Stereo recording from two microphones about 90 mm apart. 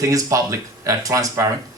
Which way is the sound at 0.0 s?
35° right (ahead or behind).